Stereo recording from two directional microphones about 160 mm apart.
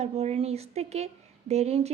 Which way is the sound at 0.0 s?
40° right (ahead or behind).